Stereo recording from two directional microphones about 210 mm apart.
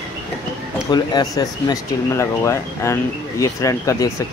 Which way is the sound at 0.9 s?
20° left (ahead or behind).